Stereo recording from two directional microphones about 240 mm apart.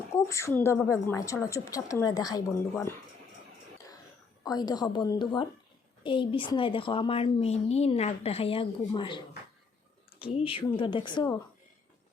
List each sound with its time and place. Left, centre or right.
0.1 s a woman's voice: centre
4.4 s a woman's voice: centre